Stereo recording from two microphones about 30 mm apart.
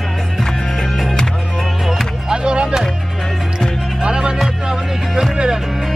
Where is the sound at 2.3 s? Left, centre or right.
Right.